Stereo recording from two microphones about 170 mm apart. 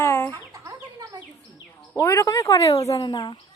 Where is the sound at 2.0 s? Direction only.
15° left (ahead or behind).